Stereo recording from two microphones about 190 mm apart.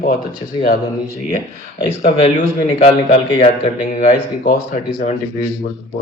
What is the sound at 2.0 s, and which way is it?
Speech, 35° left (ahead or behind).